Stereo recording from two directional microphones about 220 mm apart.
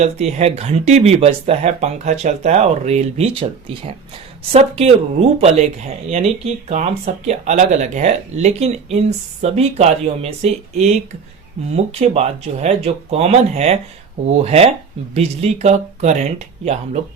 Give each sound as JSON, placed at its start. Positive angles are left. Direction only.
{"t": 0.0, "sound": "speech", "side_deg": -30}
{"t": 4.5, "sound": "speech", "side_deg": -30}
{"t": 6.1, "sound": "speech", "side_deg": -30}